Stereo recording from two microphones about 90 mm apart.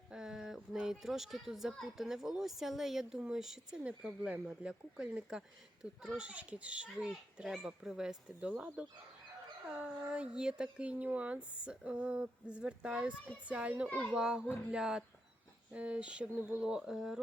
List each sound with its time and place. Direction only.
0.1 s speech: 5° right (ahead or behind)
13.8 s a child's voice: 15° left (ahead or behind)
14.1 s speech: 10° right (ahead or behind)